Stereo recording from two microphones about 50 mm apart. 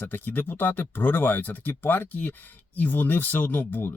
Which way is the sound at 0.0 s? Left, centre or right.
Left.